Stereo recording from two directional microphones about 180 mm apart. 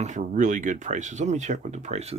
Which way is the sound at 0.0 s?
45° right (ahead or behind).